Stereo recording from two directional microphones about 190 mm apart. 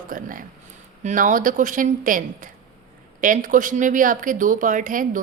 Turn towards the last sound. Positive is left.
turn(degrees=-45)  # may be behind; listen again after turning